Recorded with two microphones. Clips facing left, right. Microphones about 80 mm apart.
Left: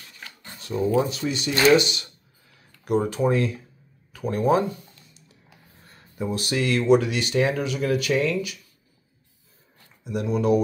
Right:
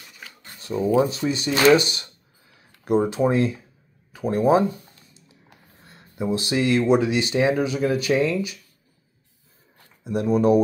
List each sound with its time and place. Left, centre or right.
0.7 s speech: centre
1.2 s speech: centre
1.7 s speech: right
2.8 s speech: right
5.9 s speech: right
10.0 s speech: right